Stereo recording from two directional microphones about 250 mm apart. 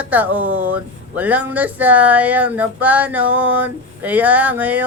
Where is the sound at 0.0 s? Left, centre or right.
Centre.